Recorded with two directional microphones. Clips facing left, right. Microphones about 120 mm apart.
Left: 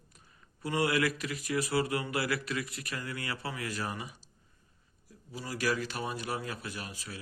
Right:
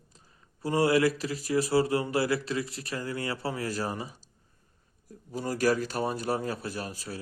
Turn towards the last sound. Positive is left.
turn(degrees=-40)  # may be behind; listen again after turning